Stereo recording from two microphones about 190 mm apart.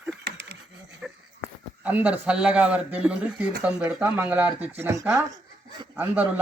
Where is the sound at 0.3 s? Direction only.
65° right (ahead or behind).